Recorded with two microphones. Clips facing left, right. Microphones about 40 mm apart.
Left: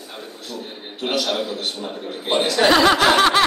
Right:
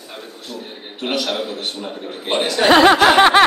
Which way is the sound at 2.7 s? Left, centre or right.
Right.